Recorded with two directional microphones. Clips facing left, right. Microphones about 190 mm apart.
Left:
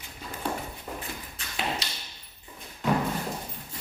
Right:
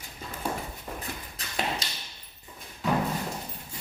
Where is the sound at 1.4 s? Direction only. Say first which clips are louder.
Right 1 dB; 40° right (ahead or behind).